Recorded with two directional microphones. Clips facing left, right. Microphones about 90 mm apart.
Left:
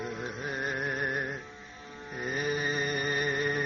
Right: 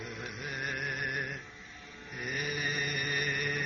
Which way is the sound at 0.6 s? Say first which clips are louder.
Left 4 dB; 30° left (ahead or behind).